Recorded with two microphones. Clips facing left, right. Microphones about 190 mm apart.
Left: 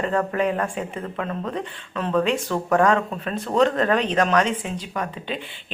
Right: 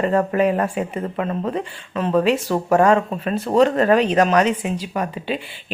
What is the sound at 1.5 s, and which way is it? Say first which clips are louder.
Speech: right 4 dB; centre (ahead or behind).